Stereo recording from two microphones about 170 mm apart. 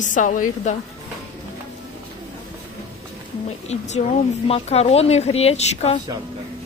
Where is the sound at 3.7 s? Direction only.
40° left (ahead or behind).